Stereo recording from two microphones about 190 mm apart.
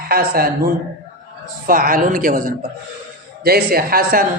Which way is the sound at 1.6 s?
50° right (ahead or behind).